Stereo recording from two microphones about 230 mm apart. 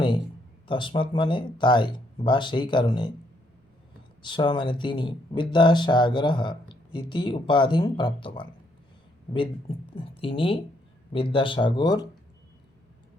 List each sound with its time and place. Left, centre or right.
0.7 s speech: left
4.2 s speech: left